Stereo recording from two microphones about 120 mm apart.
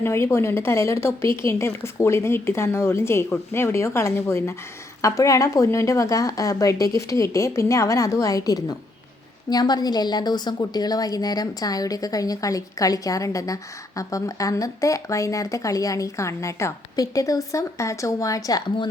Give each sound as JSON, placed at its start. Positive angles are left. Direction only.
{"t": 0.0, "sound": "a woman's voice", "side_deg": 20}